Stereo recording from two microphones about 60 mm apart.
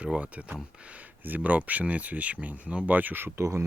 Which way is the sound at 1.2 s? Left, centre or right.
Right.